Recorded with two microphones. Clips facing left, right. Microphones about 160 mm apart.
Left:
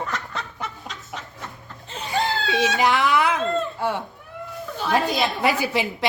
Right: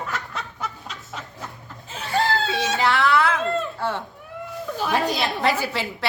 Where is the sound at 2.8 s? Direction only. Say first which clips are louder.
Right 2 dB; 15° left (ahead or behind).